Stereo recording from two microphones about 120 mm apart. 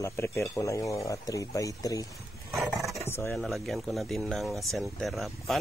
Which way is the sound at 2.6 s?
25° right (ahead or behind).